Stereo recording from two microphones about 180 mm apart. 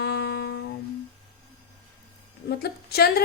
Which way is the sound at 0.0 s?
65° left (ahead or behind).